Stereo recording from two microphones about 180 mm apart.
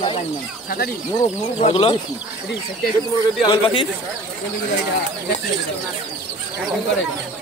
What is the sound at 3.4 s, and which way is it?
Speech, 25° left (ahead or behind).